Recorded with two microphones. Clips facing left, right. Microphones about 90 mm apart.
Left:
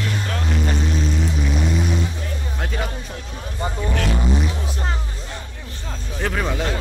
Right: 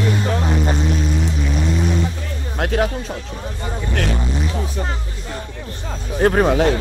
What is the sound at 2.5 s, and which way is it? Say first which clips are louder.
Music: right 10 dB; 65° right (ahead or behind).